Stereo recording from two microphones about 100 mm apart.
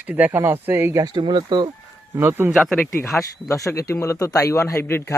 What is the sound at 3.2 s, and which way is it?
Speech, 35° left (ahead or behind).